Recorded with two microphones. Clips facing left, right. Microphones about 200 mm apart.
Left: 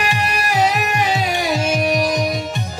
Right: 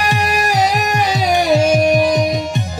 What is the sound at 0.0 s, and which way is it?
Music, 40° right (ahead or behind).